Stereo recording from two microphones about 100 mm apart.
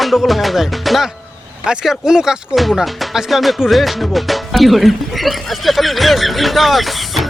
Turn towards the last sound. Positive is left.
turn(degrees=0)  # may be behind; listen again after turning